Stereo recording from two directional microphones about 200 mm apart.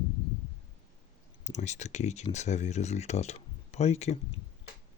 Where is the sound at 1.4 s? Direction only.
35° left (ahead or behind).